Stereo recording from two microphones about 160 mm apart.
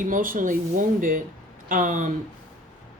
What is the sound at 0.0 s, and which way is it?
A woman's voice, 55° right (ahead or behind).